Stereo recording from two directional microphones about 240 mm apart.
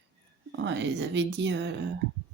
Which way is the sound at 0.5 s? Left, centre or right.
Right.